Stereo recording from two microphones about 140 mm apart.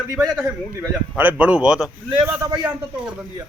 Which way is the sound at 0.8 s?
10° right (ahead or behind).